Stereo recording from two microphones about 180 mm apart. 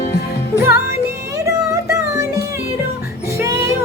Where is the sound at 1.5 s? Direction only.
15° right (ahead or behind).